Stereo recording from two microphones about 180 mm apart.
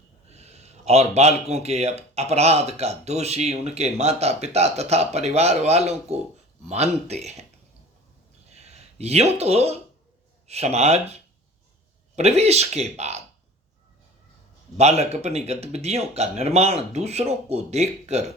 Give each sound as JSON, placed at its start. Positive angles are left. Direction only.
{"t": 0.3, "sound": "speech", "side_deg": -35}
{"t": 8.4, "sound": "a sound", "side_deg": -35}
{"t": 10.4, "sound": "speech", "side_deg": -35}
{"t": 14.8, "sound": "speech", "side_deg": -35}